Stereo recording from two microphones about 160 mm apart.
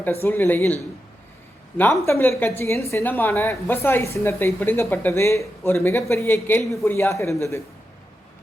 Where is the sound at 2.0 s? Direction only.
15° left (ahead or behind).